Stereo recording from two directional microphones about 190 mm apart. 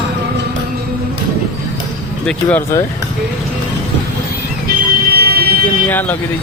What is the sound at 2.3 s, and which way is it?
Speech, 10° left (ahead or behind).